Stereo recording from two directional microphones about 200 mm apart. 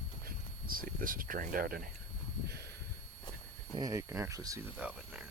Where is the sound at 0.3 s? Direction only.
45° right (ahead or behind).